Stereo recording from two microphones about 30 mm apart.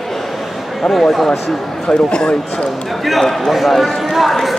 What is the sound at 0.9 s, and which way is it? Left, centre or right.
Speech, centre.